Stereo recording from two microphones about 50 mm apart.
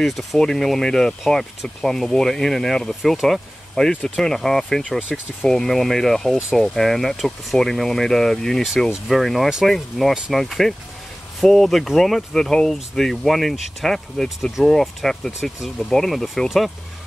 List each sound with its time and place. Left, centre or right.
0.0 s speech: centre
2.9 s speech: centre
3.7 s speech: centre